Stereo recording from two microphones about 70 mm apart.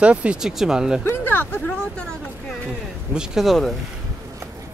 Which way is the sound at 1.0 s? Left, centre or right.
Left.